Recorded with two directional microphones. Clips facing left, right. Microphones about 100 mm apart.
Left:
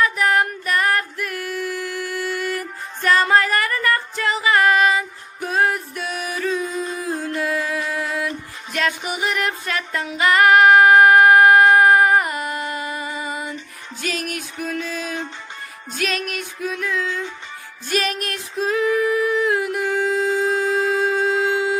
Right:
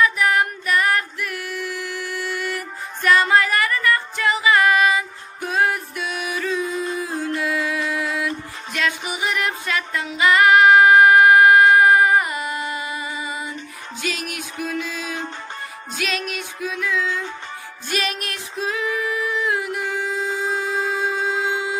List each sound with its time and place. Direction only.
0.0 s music: 40° left (ahead or behind)
17.8 s female singing: 40° left (ahead or behind)
20.9 s a sound: 45° left (ahead or behind)